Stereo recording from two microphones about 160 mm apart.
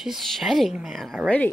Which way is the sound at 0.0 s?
Centre (ahead or behind).